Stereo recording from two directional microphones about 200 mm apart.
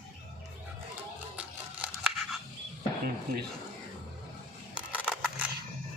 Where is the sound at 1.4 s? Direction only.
5° right (ahead or behind).